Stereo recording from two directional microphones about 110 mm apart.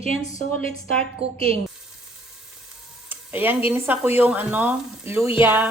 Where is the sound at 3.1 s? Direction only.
15° right (ahead or behind).